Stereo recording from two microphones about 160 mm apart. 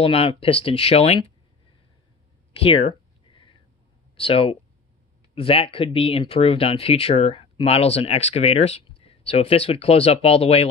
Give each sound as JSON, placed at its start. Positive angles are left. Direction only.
{"t": 0.0, "sound": "speech", "side_deg": 35}
{"t": 2.5, "sound": "a sound", "side_deg": 35}
{"t": 4.2, "sound": "speech", "side_deg": 35}